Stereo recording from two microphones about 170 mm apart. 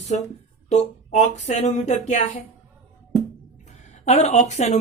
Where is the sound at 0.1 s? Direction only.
40° left (ahead or behind).